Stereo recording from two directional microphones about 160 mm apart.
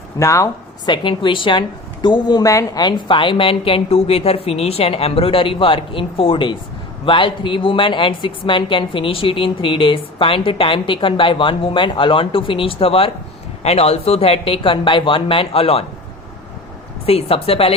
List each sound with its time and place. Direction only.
0.2 s speech: 20° left (ahead or behind); by 15.8 s 35° left (ahead or behind)
17.1 s speech: 40° left (ahead or behind)